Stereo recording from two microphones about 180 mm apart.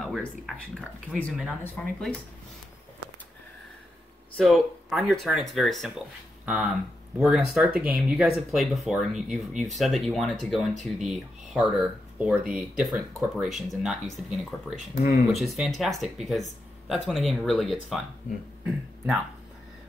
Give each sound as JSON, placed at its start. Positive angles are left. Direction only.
{"t": 0.0, "sound": "a sound", "side_deg": 0}
{"t": 0.7, "sound": "speech", "side_deg": 5}
{"t": 4.4, "sound": "speech", "side_deg": 0}
{"t": 15.0, "sound": "speech", "side_deg": 50}
{"t": 15.5, "sound": "speech", "side_deg": 0}